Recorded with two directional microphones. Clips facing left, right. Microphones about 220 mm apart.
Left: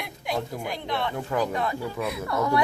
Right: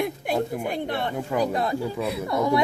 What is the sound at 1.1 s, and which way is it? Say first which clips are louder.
Speech: right 3 dB; 15° right (ahead or behind).